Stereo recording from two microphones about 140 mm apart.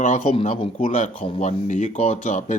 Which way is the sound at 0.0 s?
60° left (ahead or behind).